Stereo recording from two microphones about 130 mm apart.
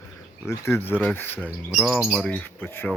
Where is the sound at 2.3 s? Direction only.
15° left (ahead or behind).